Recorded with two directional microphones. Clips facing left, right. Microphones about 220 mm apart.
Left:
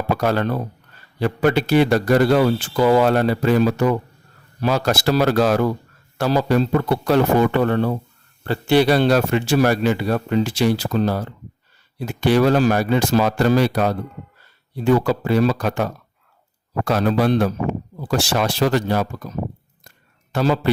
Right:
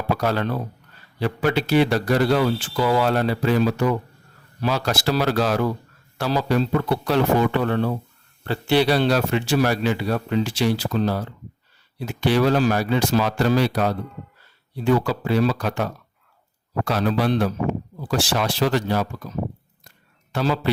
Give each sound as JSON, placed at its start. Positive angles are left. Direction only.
{"t": 0.2, "sound": "speech", "side_deg": 50}
{"t": 20.3, "sound": "speech", "side_deg": 45}